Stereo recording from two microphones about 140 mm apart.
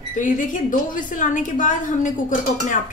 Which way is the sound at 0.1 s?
65° left (ahead or behind).